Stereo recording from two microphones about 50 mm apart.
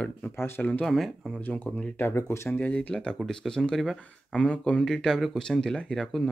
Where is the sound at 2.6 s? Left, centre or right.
Left.